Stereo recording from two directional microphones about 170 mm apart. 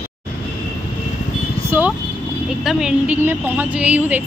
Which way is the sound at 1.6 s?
10° right (ahead or behind).